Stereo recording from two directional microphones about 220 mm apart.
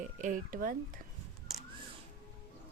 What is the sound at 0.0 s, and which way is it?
Speech, 35° right (ahead or behind).